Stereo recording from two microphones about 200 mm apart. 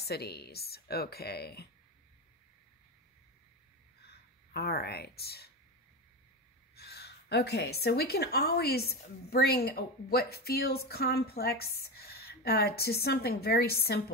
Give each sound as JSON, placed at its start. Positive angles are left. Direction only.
{"t": 0.0, "sound": "a woman's voice", "side_deg": 55}
{"t": 4.1, "sound": "speech", "side_deg": 50}
{"t": 6.7, "sound": "a woman's voice", "side_deg": 55}